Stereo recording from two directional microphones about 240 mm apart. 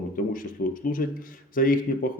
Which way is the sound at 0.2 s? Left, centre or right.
Left.